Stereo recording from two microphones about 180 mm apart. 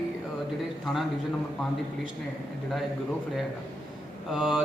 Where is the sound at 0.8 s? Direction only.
Centre (ahead or behind).